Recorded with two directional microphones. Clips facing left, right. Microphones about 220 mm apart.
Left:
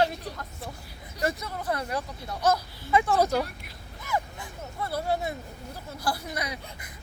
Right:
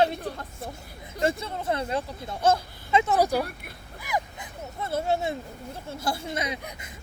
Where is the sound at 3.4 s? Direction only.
55° right (ahead or behind).